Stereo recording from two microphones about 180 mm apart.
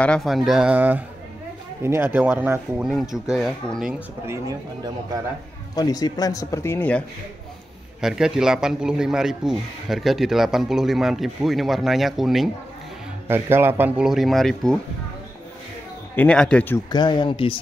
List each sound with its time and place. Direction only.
0.0 s speech: 5° left (ahead or behind)
5.8 s speech: 20° left (ahead or behind)
8.0 s speech: 5° right (ahead or behind)
13.3 s speech: 10° right (ahead or behind)
16.2 s speech: 5° left (ahead or behind)
16.9 s speech: 25° left (ahead or behind)